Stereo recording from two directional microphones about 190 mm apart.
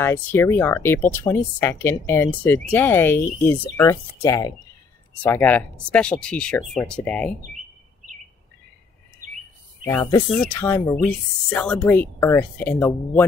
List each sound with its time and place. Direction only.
0.0 s speech: 10° left (ahead or behind)
9.2 s bird vocalization: 40° right (ahead or behind)
9.8 s speech: 10° left (ahead or behind)